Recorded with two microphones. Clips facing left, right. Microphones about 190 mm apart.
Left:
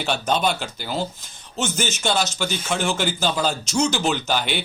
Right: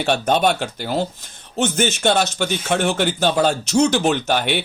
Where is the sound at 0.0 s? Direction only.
60° right (ahead or behind).